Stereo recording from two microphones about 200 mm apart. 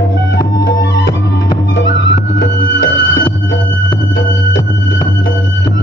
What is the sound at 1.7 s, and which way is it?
Music, 65° left (ahead or behind).